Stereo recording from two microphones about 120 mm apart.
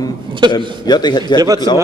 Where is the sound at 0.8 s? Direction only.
35° left (ahead or behind).